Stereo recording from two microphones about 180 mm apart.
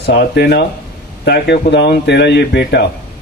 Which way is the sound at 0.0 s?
65° left (ahead or behind).